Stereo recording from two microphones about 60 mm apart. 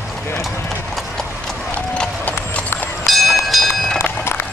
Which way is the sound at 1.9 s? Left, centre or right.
Left.